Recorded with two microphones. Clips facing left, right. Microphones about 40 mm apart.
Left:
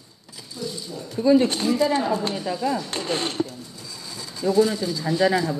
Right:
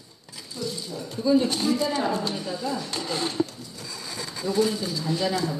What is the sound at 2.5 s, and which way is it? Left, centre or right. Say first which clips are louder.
Speech: left 5 dB; left.